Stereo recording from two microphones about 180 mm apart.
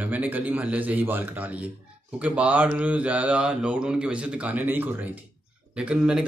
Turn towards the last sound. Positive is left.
turn(degrees=-5)  # may be behind; listen again after turning